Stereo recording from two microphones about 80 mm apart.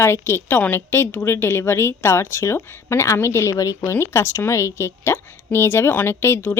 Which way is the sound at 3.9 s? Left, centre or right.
Left.